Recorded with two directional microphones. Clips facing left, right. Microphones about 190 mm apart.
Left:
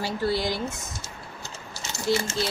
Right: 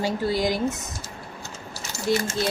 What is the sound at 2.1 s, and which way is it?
Speech, 15° right (ahead or behind).